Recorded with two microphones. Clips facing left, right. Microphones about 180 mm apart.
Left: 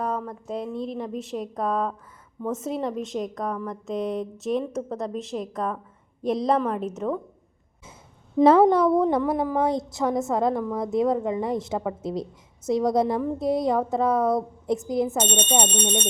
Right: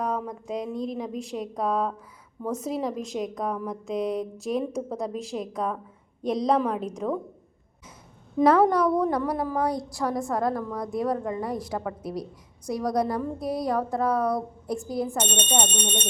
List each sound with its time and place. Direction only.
0.0 s speech: 10° right (ahead or behind)
0.9 s a woman's voice: centre (ahead or behind)
8.4 s a woman's voice: 25° left (ahead or behind)